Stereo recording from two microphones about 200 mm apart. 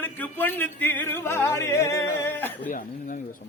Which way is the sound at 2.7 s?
40° left (ahead or behind).